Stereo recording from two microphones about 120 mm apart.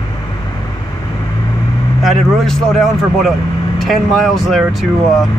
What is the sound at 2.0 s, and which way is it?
Speech, centre (ahead or behind).